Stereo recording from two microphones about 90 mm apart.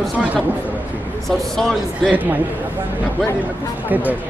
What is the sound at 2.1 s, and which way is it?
Speech, 20° right (ahead or behind).